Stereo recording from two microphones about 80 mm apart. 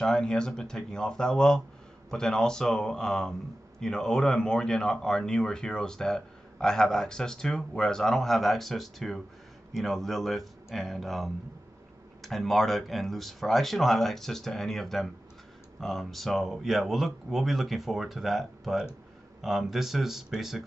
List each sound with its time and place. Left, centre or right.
0.0 s speech: centre